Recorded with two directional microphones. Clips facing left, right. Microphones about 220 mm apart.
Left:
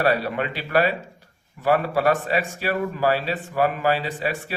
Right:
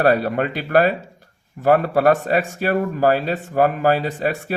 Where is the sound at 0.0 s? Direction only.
45° right (ahead or behind).